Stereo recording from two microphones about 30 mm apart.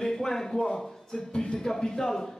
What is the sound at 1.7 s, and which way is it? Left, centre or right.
Speech, centre.